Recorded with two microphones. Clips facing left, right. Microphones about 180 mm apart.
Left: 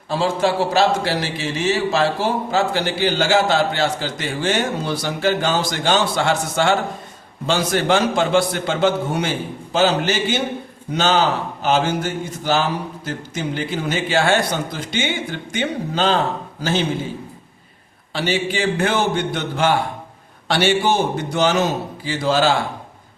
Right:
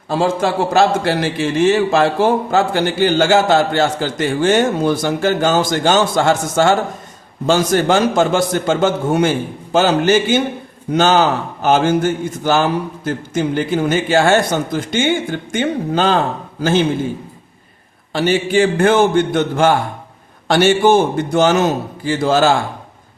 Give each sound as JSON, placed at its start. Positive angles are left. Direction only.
{"t": 0.1, "sound": "a man's voice", "side_deg": -45}
{"t": 18.1, "sound": "a man's voice", "side_deg": -50}